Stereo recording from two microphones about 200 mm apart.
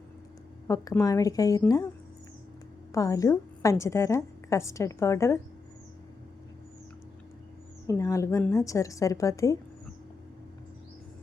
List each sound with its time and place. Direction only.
0.7 s a woman's voice: 15° left (ahead or behind)
2.9 s a woman's voice: 15° left (ahead or behind)
7.9 s a woman's voice: 15° left (ahead or behind)